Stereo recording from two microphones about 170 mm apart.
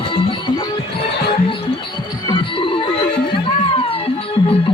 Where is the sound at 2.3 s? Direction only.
30° left (ahead or behind).